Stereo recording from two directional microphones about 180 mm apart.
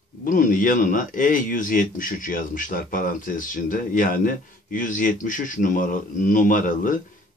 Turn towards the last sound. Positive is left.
turn(degrees=50)  # may be behind; listen again after turning